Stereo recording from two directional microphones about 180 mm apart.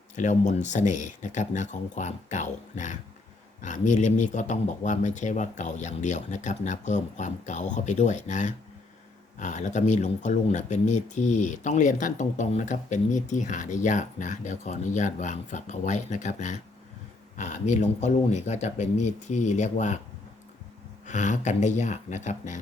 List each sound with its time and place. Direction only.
0.2 s speech: 40° left (ahead or behind)
21.1 s speech: 45° left (ahead or behind)